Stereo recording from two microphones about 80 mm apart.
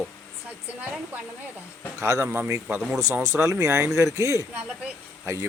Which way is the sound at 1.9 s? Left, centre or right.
Right.